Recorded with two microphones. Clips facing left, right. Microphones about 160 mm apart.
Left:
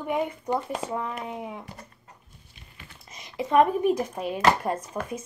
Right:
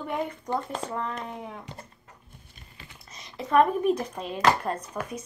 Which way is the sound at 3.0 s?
10° left (ahead or behind).